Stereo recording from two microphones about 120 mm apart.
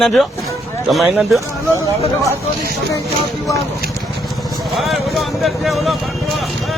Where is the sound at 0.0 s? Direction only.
5° left (ahead or behind).